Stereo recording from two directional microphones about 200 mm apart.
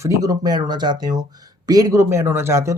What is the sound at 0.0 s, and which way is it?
Speech, 15° right (ahead or behind).